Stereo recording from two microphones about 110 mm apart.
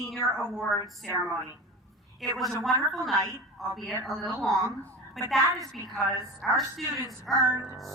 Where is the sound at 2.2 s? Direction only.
Centre (ahead or behind).